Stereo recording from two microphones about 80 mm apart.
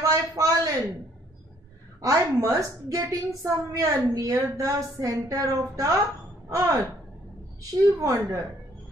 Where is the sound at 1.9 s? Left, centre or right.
Right.